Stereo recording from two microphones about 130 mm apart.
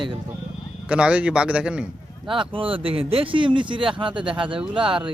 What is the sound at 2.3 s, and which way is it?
Speech, 40° right (ahead or behind).